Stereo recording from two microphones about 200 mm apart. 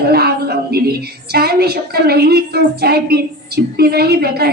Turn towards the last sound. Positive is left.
turn(degrees=-50)  # may be behind; listen again after turning